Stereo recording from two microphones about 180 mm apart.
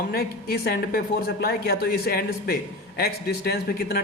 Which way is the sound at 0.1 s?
55° left (ahead or behind).